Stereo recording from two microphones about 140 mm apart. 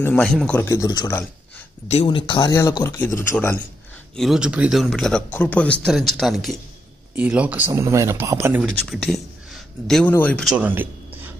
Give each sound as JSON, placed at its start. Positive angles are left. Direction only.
{"t": 0.0, "sound": "speech", "side_deg": 10}
{"t": 0.6, "sound": "speech", "side_deg": 20}
{"t": 2.5, "sound": "speech", "side_deg": 25}
{"t": 4.2, "sound": "a man's voice", "side_deg": -5}
{"t": 8.6, "sound": "speech", "side_deg": 0}
{"t": 10.4, "sound": "a sound", "side_deg": -10}